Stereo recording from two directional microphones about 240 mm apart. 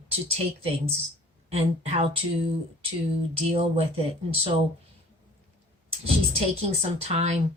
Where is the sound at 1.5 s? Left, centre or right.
Right.